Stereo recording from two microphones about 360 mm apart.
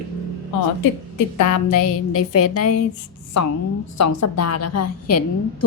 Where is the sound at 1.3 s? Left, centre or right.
Left.